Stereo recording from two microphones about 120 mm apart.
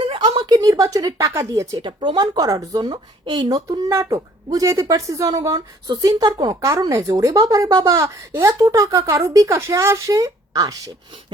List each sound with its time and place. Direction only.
0.0 s a sound: 40° right (ahead or behind)
0.4 s speech: 35° right (ahead or behind)
1.9 s speech: 40° right (ahead or behind)